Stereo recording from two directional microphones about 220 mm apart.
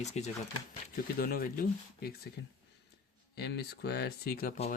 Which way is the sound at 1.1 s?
40° left (ahead or behind).